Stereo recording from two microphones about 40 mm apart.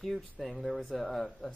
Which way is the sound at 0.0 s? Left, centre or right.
Centre.